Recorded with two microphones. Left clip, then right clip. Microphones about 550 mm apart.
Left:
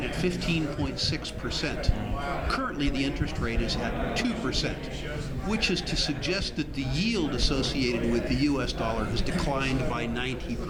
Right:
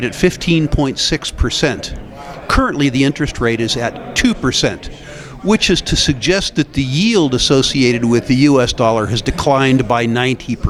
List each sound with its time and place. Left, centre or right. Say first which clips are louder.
0.0 s speech: right 14 dB; right